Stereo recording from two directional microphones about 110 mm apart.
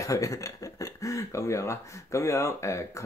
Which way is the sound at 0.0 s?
30° left (ahead or behind).